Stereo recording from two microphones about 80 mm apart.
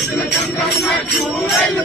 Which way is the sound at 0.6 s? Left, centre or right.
Centre.